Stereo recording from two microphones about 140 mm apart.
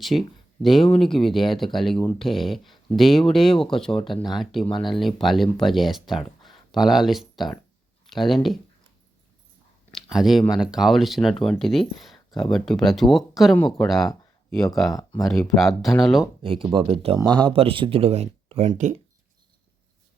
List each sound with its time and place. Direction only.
0.0 s speech: centre (ahead or behind)
8.0 s a sound: centre (ahead or behind)
9.9 s a sound: centre (ahead or behind)
10.6 s speech: 5° right (ahead or behind)
16.4 s speech: 40° right (ahead or behind)
17.2 s speech: 30° right (ahead or behind); by 18.7 s 50° right (ahead or behind)